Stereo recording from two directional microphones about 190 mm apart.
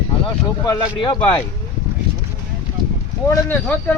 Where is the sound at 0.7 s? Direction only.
25° left (ahead or behind).